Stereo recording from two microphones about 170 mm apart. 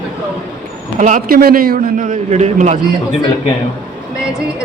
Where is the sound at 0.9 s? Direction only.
50° right (ahead or behind).